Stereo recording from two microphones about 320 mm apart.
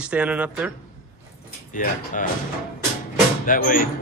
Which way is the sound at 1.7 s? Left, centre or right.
Left.